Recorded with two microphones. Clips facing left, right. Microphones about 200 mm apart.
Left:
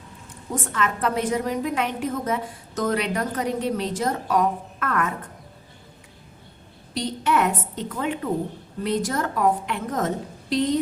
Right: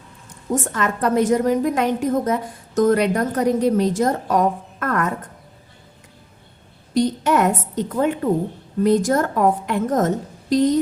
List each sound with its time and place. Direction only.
0.6 s a woman's voice: 45° right (ahead or behind)
6.9 s a woman's voice: 45° right (ahead or behind)